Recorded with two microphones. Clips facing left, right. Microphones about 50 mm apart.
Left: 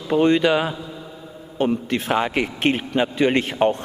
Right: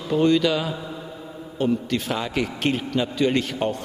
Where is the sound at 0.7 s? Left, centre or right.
Centre.